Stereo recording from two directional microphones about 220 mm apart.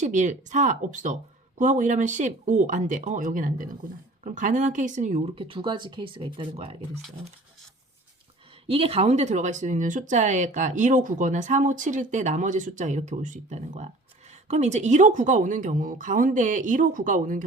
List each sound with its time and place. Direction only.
0.0 s speech: 35° right (ahead or behind)
8.6 s speech: 25° right (ahead or behind)